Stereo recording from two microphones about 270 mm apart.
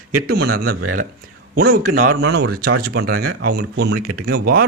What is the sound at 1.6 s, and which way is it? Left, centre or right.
Speech, right.